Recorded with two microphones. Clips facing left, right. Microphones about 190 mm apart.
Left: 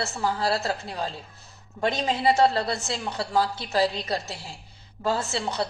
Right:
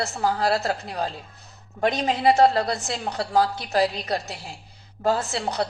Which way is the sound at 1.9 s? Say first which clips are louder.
Right 3 dB; 45° right (ahead or behind).